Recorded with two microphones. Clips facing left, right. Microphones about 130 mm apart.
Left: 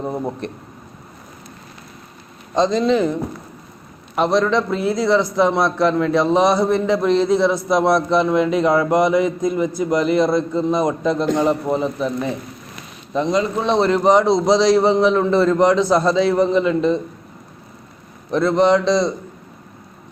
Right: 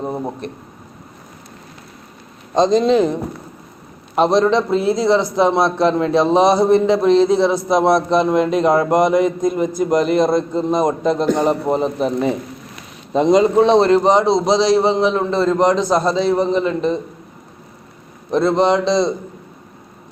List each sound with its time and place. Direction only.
0.0 s a man's voice: 15° right (ahead or behind)
2.6 s a man's voice: 20° right (ahead or behind)
8.7 s a man's voice: 45° right (ahead or behind)
10.2 s a man's voice: 20° right (ahead or behind)
13.1 s a man's voice: 70° right (ahead or behind)
13.7 s a man's voice: 30° right (ahead or behind)
18.3 s a man's voice: 25° right (ahead or behind)